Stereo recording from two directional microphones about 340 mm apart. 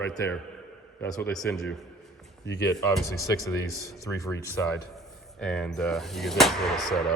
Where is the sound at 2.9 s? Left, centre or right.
Centre.